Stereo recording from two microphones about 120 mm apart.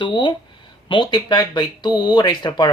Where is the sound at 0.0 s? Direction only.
40° left (ahead or behind).